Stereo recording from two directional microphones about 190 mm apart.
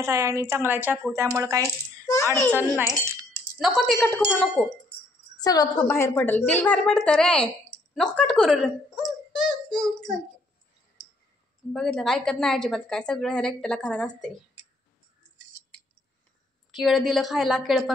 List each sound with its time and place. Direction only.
0.0 s a woman's voice: 15° right (ahead or behind)
2.1 s a child's voice: 20° left (ahead or behind)
3.5 s a woman's voice: centre (ahead or behind)
5.4 s a woman's voice: 20° left (ahead or behind); by 7.4 s 5° left (ahead or behind)
7.9 s a sound: 5° left (ahead or behind)
11.7 s a woman's voice: 5° left (ahead or behind)
16.7 s a woman's voice: centre (ahead or behind)